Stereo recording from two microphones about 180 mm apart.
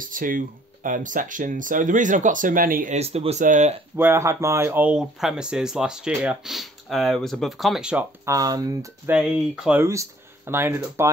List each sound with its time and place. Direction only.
0.0 s speech: 50° right (ahead or behind)
3.0 s speech: 35° right (ahead or behind)
3.9 s speech: 15° right (ahead or behind)
8.3 s speech: 20° right (ahead or behind)
9.1 s speech: 5° right (ahead or behind)